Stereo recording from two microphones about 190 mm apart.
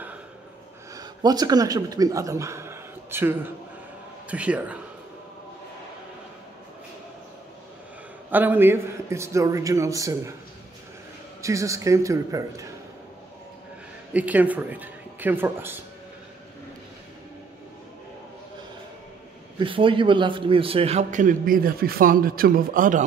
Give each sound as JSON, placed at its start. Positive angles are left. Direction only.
{"t": 0.9, "sound": "a man's voice", "side_deg": -20}
{"t": 8.3, "sound": "a man's voice", "side_deg": -10}
{"t": 11.4, "sound": "a man's voice", "side_deg": -15}
{"t": 14.1, "sound": "a man's voice", "side_deg": -10}
{"t": 19.6, "sound": "a man's voice", "side_deg": -25}